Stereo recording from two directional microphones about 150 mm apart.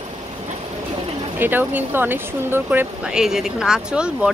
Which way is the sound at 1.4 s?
10° right (ahead or behind).